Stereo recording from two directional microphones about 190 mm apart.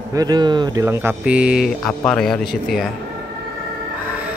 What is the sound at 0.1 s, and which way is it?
Speech, 20° right (ahead or behind).